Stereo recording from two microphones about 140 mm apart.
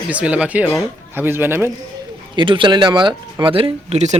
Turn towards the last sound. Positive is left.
turn(degrees=-40)  # may be behind; listen again after turning